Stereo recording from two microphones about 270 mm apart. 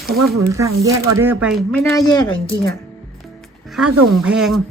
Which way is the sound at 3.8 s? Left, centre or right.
Right.